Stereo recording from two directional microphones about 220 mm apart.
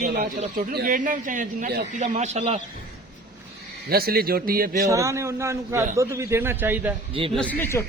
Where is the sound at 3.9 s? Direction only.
45° right (ahead or behind).